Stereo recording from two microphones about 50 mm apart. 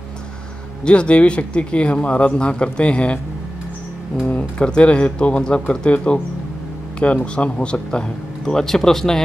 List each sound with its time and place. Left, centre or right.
0.8 s speech: left
4.4 s speech: centre